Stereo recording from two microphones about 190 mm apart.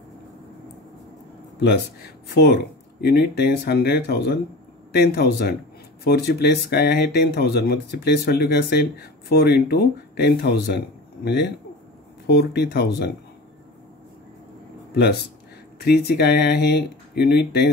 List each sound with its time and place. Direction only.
1.6 s speech: 60° left (ahead or behind)
15.0 s speech: 60° left (ahead or behind)